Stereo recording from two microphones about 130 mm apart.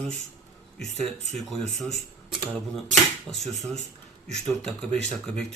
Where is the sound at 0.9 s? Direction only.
60° right (ahead or behind).